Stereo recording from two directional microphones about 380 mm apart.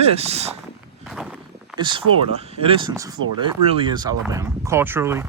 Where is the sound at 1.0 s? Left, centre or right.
Centre.